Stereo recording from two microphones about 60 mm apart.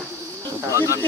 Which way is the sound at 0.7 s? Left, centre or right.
Right.